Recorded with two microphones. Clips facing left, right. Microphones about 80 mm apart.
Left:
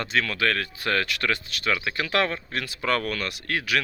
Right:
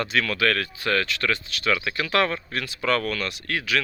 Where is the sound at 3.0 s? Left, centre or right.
Left.